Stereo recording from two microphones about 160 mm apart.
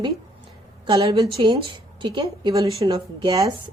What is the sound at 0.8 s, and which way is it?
A woman's voice, 35° right (ahead or behind).